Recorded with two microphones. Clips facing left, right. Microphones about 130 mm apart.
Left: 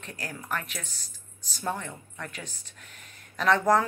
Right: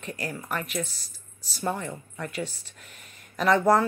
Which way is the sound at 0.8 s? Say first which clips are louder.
Right 11 dB; 35° right (ahead or behind).